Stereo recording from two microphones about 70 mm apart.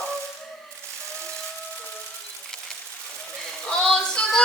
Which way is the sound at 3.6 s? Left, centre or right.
Centre.